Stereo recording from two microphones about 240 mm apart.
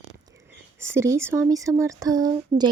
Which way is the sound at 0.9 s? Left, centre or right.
Centre.